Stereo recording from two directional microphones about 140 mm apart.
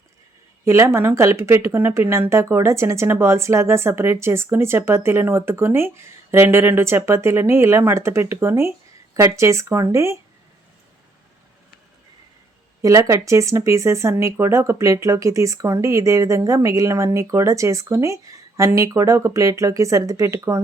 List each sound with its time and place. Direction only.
0.6 s speech: 20° right (ahead or behind)
12.8 s speech: 25° right (ahead or behind)